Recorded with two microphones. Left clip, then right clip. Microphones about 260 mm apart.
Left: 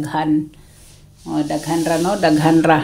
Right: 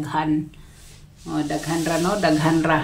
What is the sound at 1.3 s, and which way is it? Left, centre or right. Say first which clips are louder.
Speech: left 4 dB; left.